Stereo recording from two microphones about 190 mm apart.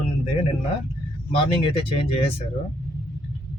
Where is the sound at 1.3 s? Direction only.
30° left (ahead or behind).